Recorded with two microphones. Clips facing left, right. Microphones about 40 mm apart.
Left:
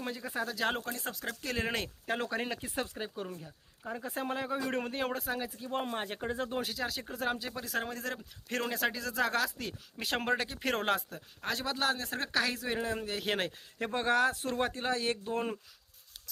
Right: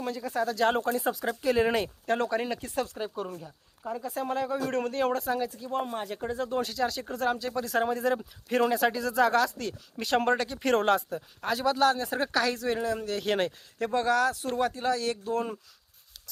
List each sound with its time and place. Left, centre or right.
0.0 s speech: centre
0.9 s speech: centre
2.5 s speech: centre
4.0 s speech: left; by 5.4 s centre
5.4 s speech: left
6.6 s speech: centre
7.7 s speech: centre
12.3 s speech: centre
13.7 s speech: left